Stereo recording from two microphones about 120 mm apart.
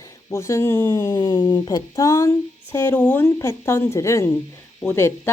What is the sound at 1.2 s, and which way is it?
Speech, 35° left (ahead or behind).